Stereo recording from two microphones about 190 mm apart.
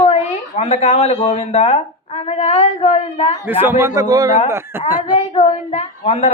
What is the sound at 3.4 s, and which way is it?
A man's voice, 10° right (ahead or behind).